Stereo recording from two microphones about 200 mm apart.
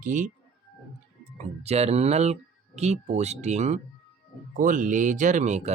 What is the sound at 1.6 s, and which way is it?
Speech, 30° right (ahead or behind).